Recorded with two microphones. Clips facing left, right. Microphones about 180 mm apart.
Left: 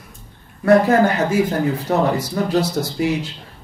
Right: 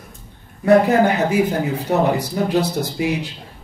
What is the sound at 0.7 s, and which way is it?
Speech, 15° right (ahead or behind).